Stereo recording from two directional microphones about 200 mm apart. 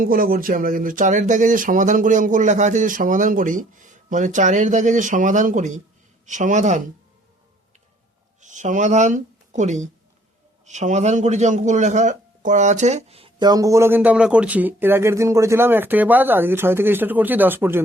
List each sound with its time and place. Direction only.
0.0 s speech: 45° right (ahead or behind)
8.4 s speech: 35° right (ahead or behind); by 17.8 s 10° right (ahead or behind)